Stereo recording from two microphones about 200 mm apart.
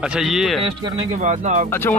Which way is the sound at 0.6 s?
25° right (ahead or behind).